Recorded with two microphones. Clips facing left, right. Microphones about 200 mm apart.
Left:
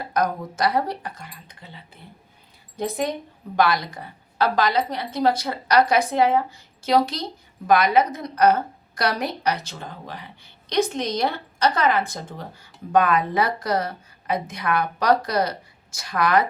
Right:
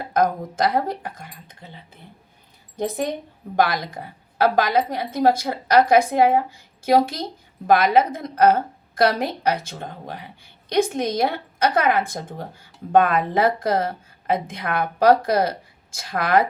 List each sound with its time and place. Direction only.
0.0 s a woman's voice: 50° right (ahead or behind)